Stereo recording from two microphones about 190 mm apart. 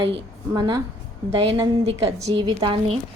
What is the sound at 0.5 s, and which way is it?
Speech, 25° right (ahead or behind).